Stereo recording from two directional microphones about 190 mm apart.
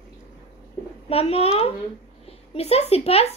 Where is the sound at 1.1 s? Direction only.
30° left (ahead or behind).